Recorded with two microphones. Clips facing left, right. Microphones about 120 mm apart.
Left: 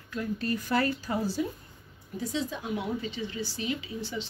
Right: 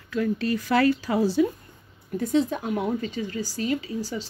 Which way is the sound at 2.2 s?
55° right (ahead or behind).